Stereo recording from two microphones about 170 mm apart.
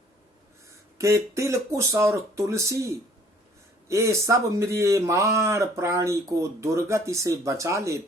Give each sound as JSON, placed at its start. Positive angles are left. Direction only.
{"t": 0.9, "sound": "a man's voice", "side_deg": -15}